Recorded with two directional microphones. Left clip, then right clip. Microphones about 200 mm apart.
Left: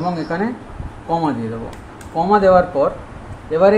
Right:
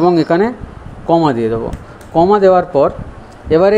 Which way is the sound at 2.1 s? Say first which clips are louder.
Right 3 dB; 40° right (ahead or behind).